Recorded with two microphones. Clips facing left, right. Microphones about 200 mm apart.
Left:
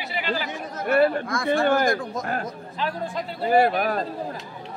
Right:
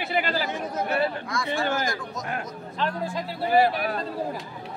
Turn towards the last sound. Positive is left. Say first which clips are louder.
# left 2 dB
turn(degrees=50)  # may be behind; listen again after turning